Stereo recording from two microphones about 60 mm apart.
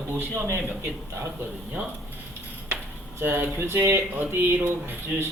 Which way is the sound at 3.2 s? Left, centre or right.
Right.